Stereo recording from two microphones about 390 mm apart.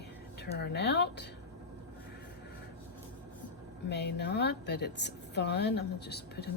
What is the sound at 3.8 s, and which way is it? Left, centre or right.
A woman's voice, left.